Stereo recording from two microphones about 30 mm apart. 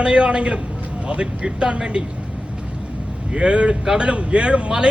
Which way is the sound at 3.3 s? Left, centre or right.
Right.